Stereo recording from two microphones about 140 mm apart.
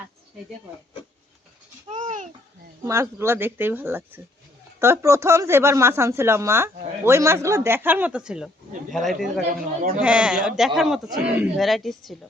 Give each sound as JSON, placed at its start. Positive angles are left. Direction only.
{"t": 1.9, "sound": "babbling", "side_deg": -60}
{"t": 2.8, "sound": "speech", "side_deg": -20}